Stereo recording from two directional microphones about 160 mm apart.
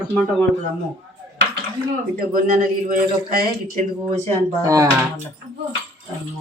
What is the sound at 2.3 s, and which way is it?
A man's voice, 55° right (ahead or behind).